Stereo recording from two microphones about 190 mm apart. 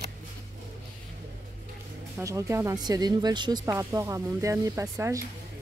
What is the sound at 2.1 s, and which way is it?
Speech, 15° right (ahead or behind).